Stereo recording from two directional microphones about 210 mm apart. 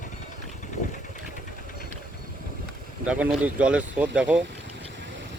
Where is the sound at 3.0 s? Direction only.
5° right (ahead or behind).